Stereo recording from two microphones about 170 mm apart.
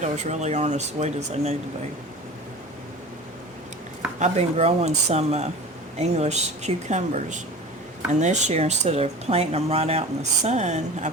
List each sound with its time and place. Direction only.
0.0 s speech: 40° right (ahead or behind)
4.2 s speech: 40° right (ahead or behind)